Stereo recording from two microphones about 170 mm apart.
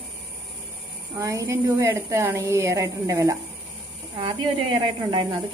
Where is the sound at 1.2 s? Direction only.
20° right (ahead or behind).